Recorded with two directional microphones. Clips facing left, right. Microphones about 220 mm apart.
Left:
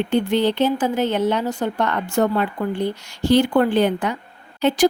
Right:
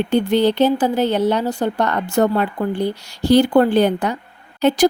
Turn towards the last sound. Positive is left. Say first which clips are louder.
# right 2 dB
turn(degrees=-40)  # may be behind; listen again after turning